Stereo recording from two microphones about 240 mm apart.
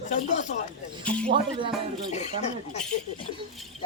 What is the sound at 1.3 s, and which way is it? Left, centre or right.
Speech, right.